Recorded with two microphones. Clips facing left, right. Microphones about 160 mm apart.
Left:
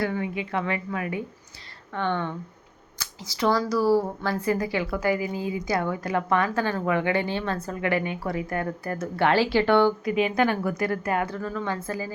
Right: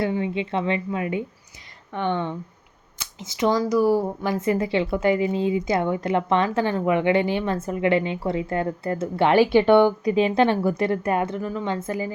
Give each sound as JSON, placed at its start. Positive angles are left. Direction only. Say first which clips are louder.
{"t": 0.0, "sound": "speech", "louder": "right 3 dB", "side_deg": -25}